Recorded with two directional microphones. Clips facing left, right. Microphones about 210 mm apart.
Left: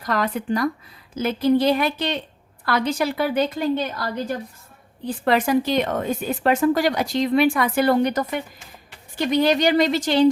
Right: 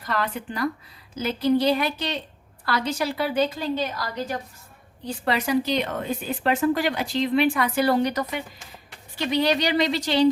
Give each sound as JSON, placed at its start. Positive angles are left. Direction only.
{"t": 0.0, "sound": "speech", "side_deg": 40}
{"t": 1.1, "sound": "a woman's voice", "side_deg": 50}
{"t": 5.0, "sound": "speech", "side_deg": 50}